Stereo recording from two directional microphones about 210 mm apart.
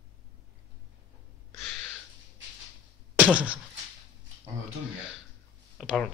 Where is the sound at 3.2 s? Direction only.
5° right (ahead or behind).